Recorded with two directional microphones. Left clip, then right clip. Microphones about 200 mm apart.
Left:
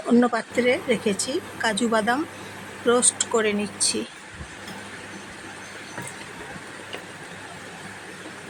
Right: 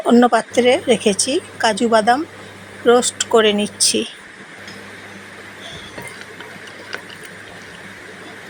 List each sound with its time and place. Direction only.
0.1 s speech: 15° right (ahead or behind)